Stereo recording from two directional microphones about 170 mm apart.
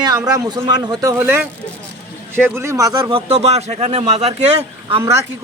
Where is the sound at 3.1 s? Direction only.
35° right (ahead or behind).